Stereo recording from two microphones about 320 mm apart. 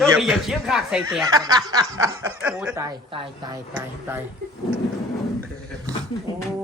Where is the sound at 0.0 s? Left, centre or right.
Centre.